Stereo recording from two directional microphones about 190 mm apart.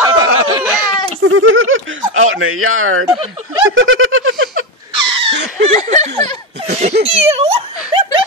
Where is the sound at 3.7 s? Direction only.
90° right.